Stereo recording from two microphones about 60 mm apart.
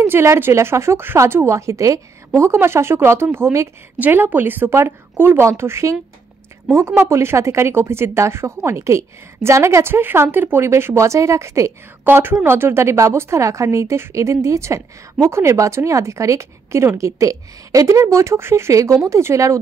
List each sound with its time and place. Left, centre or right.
0.0 s speech: right
2.5 s speech: right
4.0 s a woman's voice: right
4.6 s a woman's voice: right
7.0 s speech: right
12.0 s a woman's voice: right